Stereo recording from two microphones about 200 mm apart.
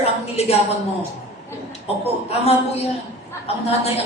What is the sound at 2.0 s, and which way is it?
Speech, 30° left (ahead or behind).